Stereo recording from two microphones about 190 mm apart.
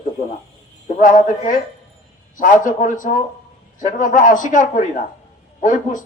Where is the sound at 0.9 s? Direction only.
40° left (ahead or behind).